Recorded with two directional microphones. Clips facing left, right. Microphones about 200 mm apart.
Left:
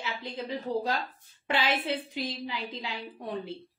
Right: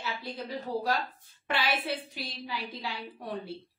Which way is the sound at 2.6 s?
20° left (ahead or behind).